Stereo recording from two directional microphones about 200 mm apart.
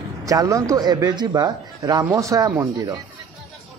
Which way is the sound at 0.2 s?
15° right (ahead or behind).